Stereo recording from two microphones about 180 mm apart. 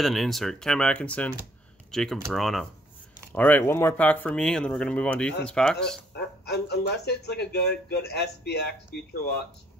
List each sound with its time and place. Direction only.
0.0 s speech: centre (ahead or behind)
6.1 s a man's voice: 65° left (ahead or behind)